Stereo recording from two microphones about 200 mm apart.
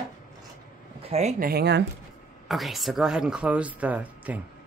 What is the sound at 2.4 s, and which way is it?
Speech, centre (ahead or behind).